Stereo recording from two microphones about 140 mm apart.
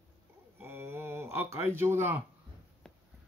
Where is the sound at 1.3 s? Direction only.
15° right (ahead or behind).